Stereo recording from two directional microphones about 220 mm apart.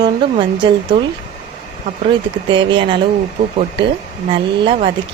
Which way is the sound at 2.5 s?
20° right (ahead or behind).